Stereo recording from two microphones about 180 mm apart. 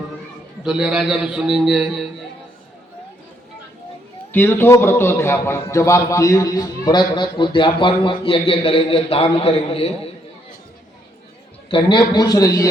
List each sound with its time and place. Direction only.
0.6 s a man's voice: centre (ahead or behind)
4.3 s a man's voice: 10° left (ahead or behind); by 9.9 s 30° left (ahead or behind)
11.7 s a man's voice: 25° left (ahead or behind)